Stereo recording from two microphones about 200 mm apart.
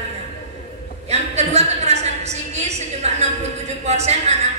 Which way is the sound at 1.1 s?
35° right (ahead or behind).